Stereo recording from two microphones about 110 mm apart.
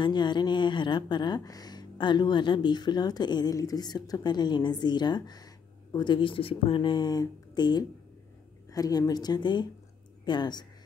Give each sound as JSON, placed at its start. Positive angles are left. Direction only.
{"t": 0.0, "sound": "speech", "side_deg": 45}